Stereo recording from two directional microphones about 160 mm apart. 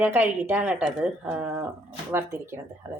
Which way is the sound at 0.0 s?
10° right (ahead or behind).